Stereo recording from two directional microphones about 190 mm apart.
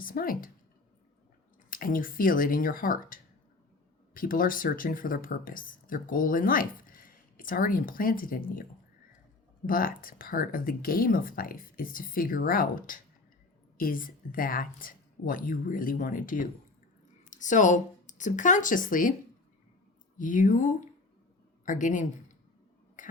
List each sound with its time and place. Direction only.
0.0 s speech: 50° left (ahead or behind)
1.7 s speech: 45° left (ahead or behind)
9.6 s speech: 50° left (ahead or behind)
20.1 s speech: 45° left (ahead or behind)
23.0 s whispering: 45° left (ahead or behind)